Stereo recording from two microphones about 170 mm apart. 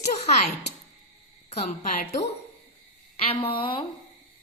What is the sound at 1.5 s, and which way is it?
Speech, 40° left (ahead or behind).